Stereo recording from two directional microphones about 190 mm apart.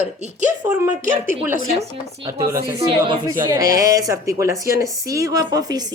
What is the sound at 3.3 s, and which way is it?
A woman's voice, 15° right (ahead or behind).